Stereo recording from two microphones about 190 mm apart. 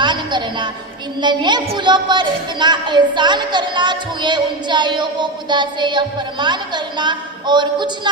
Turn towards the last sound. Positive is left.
turn(degrees=-25)  # may be behind; listen again after turning